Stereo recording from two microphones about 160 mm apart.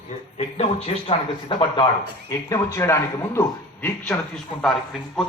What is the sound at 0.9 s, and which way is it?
Speech, 45° left (ahead or behind).